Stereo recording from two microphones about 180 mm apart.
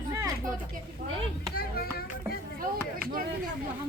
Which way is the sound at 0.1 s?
15° right (ahead or behind).